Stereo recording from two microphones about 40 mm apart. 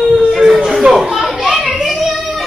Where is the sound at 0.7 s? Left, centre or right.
Centre.